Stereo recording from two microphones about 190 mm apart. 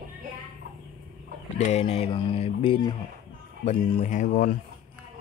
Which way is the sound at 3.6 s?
35° left (ahead or behind).